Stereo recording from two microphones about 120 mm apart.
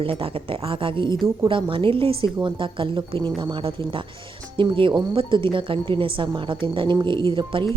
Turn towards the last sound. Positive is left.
turn(degrees=-45)  # may be behind; listen again after turning